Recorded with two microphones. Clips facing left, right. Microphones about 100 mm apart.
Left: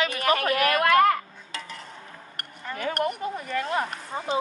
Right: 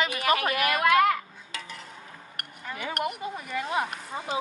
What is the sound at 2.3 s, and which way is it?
Speech, 5° right (ahead or behind).